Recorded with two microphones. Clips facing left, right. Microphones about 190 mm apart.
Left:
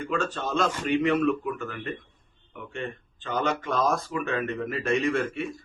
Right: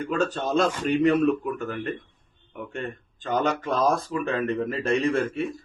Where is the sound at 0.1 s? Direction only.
40° right (ahead or behind).